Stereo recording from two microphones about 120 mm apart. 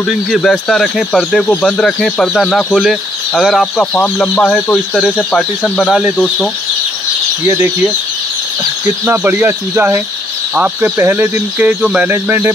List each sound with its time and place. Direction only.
0.3 s speech: centre (ahead or behind)
5.6 s speech: 5° right (ahead or behind)
7.4 s speech: 25° right (ahead or behind)